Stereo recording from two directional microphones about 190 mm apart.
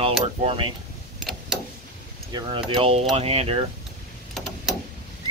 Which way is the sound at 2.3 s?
25° right (ahead or behind).